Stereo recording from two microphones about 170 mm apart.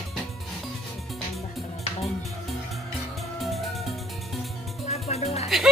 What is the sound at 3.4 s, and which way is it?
Music, centre (ahead or behind).